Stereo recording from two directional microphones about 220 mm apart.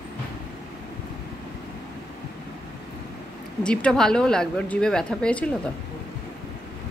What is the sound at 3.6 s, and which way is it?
A woman's voice, 5° left (ahead or behind).